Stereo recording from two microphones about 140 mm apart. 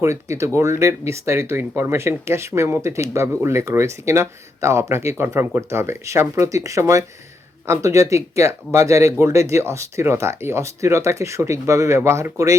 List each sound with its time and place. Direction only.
0.0 s speech: 20° right (ahead or behind)